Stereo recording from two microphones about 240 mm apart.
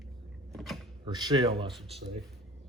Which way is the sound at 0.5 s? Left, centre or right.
Centre.